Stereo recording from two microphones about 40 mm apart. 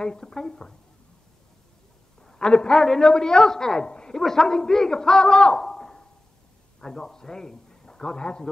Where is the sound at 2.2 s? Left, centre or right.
Centre.